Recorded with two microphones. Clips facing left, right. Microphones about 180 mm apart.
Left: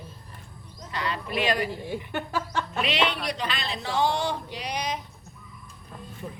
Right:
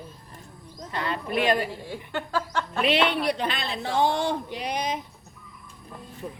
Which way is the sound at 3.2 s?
55° right (ahead or behind).